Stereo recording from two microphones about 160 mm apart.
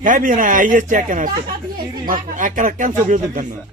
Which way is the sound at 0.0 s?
55° right (ahead or behind).